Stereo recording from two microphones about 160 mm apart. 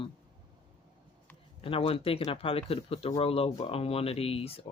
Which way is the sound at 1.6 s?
35° left (ahead or behind).